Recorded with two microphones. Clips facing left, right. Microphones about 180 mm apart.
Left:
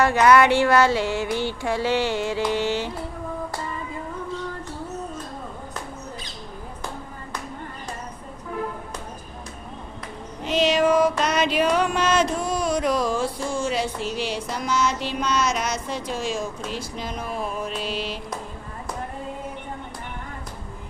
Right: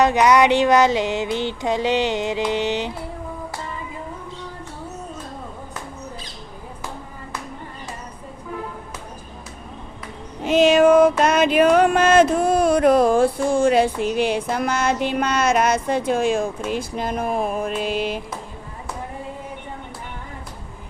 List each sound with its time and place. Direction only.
0.0 s female singing: 15° right (ahead or behind)
10.4 s a sound: 50° right (ahead or behind)
16.6 s speech: 55° right (ahead or behind)